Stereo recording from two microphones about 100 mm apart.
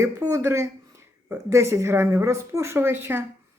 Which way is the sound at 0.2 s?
30° right (ahead or behind).